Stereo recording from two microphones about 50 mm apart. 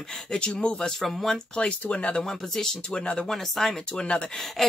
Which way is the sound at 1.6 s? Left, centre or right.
Left.